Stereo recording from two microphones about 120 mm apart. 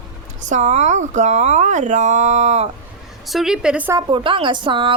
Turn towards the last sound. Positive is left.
turn(degrees=-45)  # may be behind; listen again after turning